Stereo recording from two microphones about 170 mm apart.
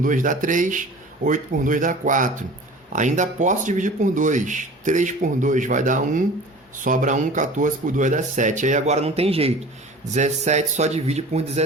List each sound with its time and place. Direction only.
0.0 s speech: 50° right (ahead or behind)